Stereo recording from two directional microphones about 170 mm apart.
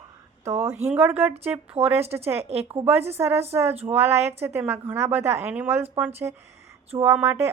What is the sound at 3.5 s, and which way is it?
A woman's voice, 15° right (ahead or behind).